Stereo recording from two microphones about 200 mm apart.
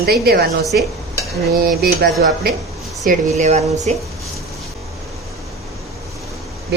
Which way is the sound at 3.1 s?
35° right (ahead or behind).